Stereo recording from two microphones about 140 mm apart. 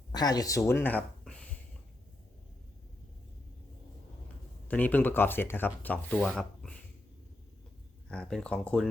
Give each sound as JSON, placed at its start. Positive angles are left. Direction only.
{"t": 0.1, "sound": "speech", "side_deg": 30}
{"t": 4.7, "sound": "speech", "side_deg": 10}
{"t": 8.1, "sound": "speech", "side_deg": 5}